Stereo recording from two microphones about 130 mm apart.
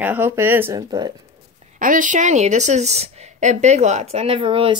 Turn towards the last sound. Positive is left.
turn(degrees=-40)  # may be behind; listen again after turning